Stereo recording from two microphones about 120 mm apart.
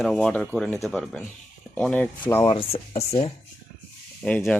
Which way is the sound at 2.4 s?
50° left (ahead or behind).